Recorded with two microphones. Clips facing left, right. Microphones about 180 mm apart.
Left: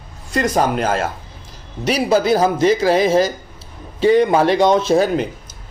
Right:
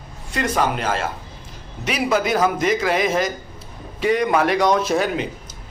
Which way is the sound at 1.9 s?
35° left (ahead or behind).